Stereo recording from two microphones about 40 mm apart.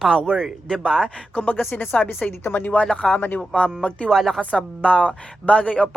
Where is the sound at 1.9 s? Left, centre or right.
Left.